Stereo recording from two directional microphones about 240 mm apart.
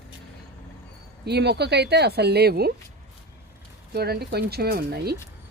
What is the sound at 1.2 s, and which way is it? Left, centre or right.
Speech, right.